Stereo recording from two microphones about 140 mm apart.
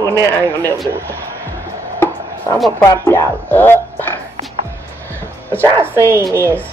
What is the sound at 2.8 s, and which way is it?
A woman's voice, 20° left (ahead or behind).